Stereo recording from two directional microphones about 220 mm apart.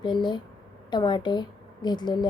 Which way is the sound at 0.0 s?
20° left (ahead or behind).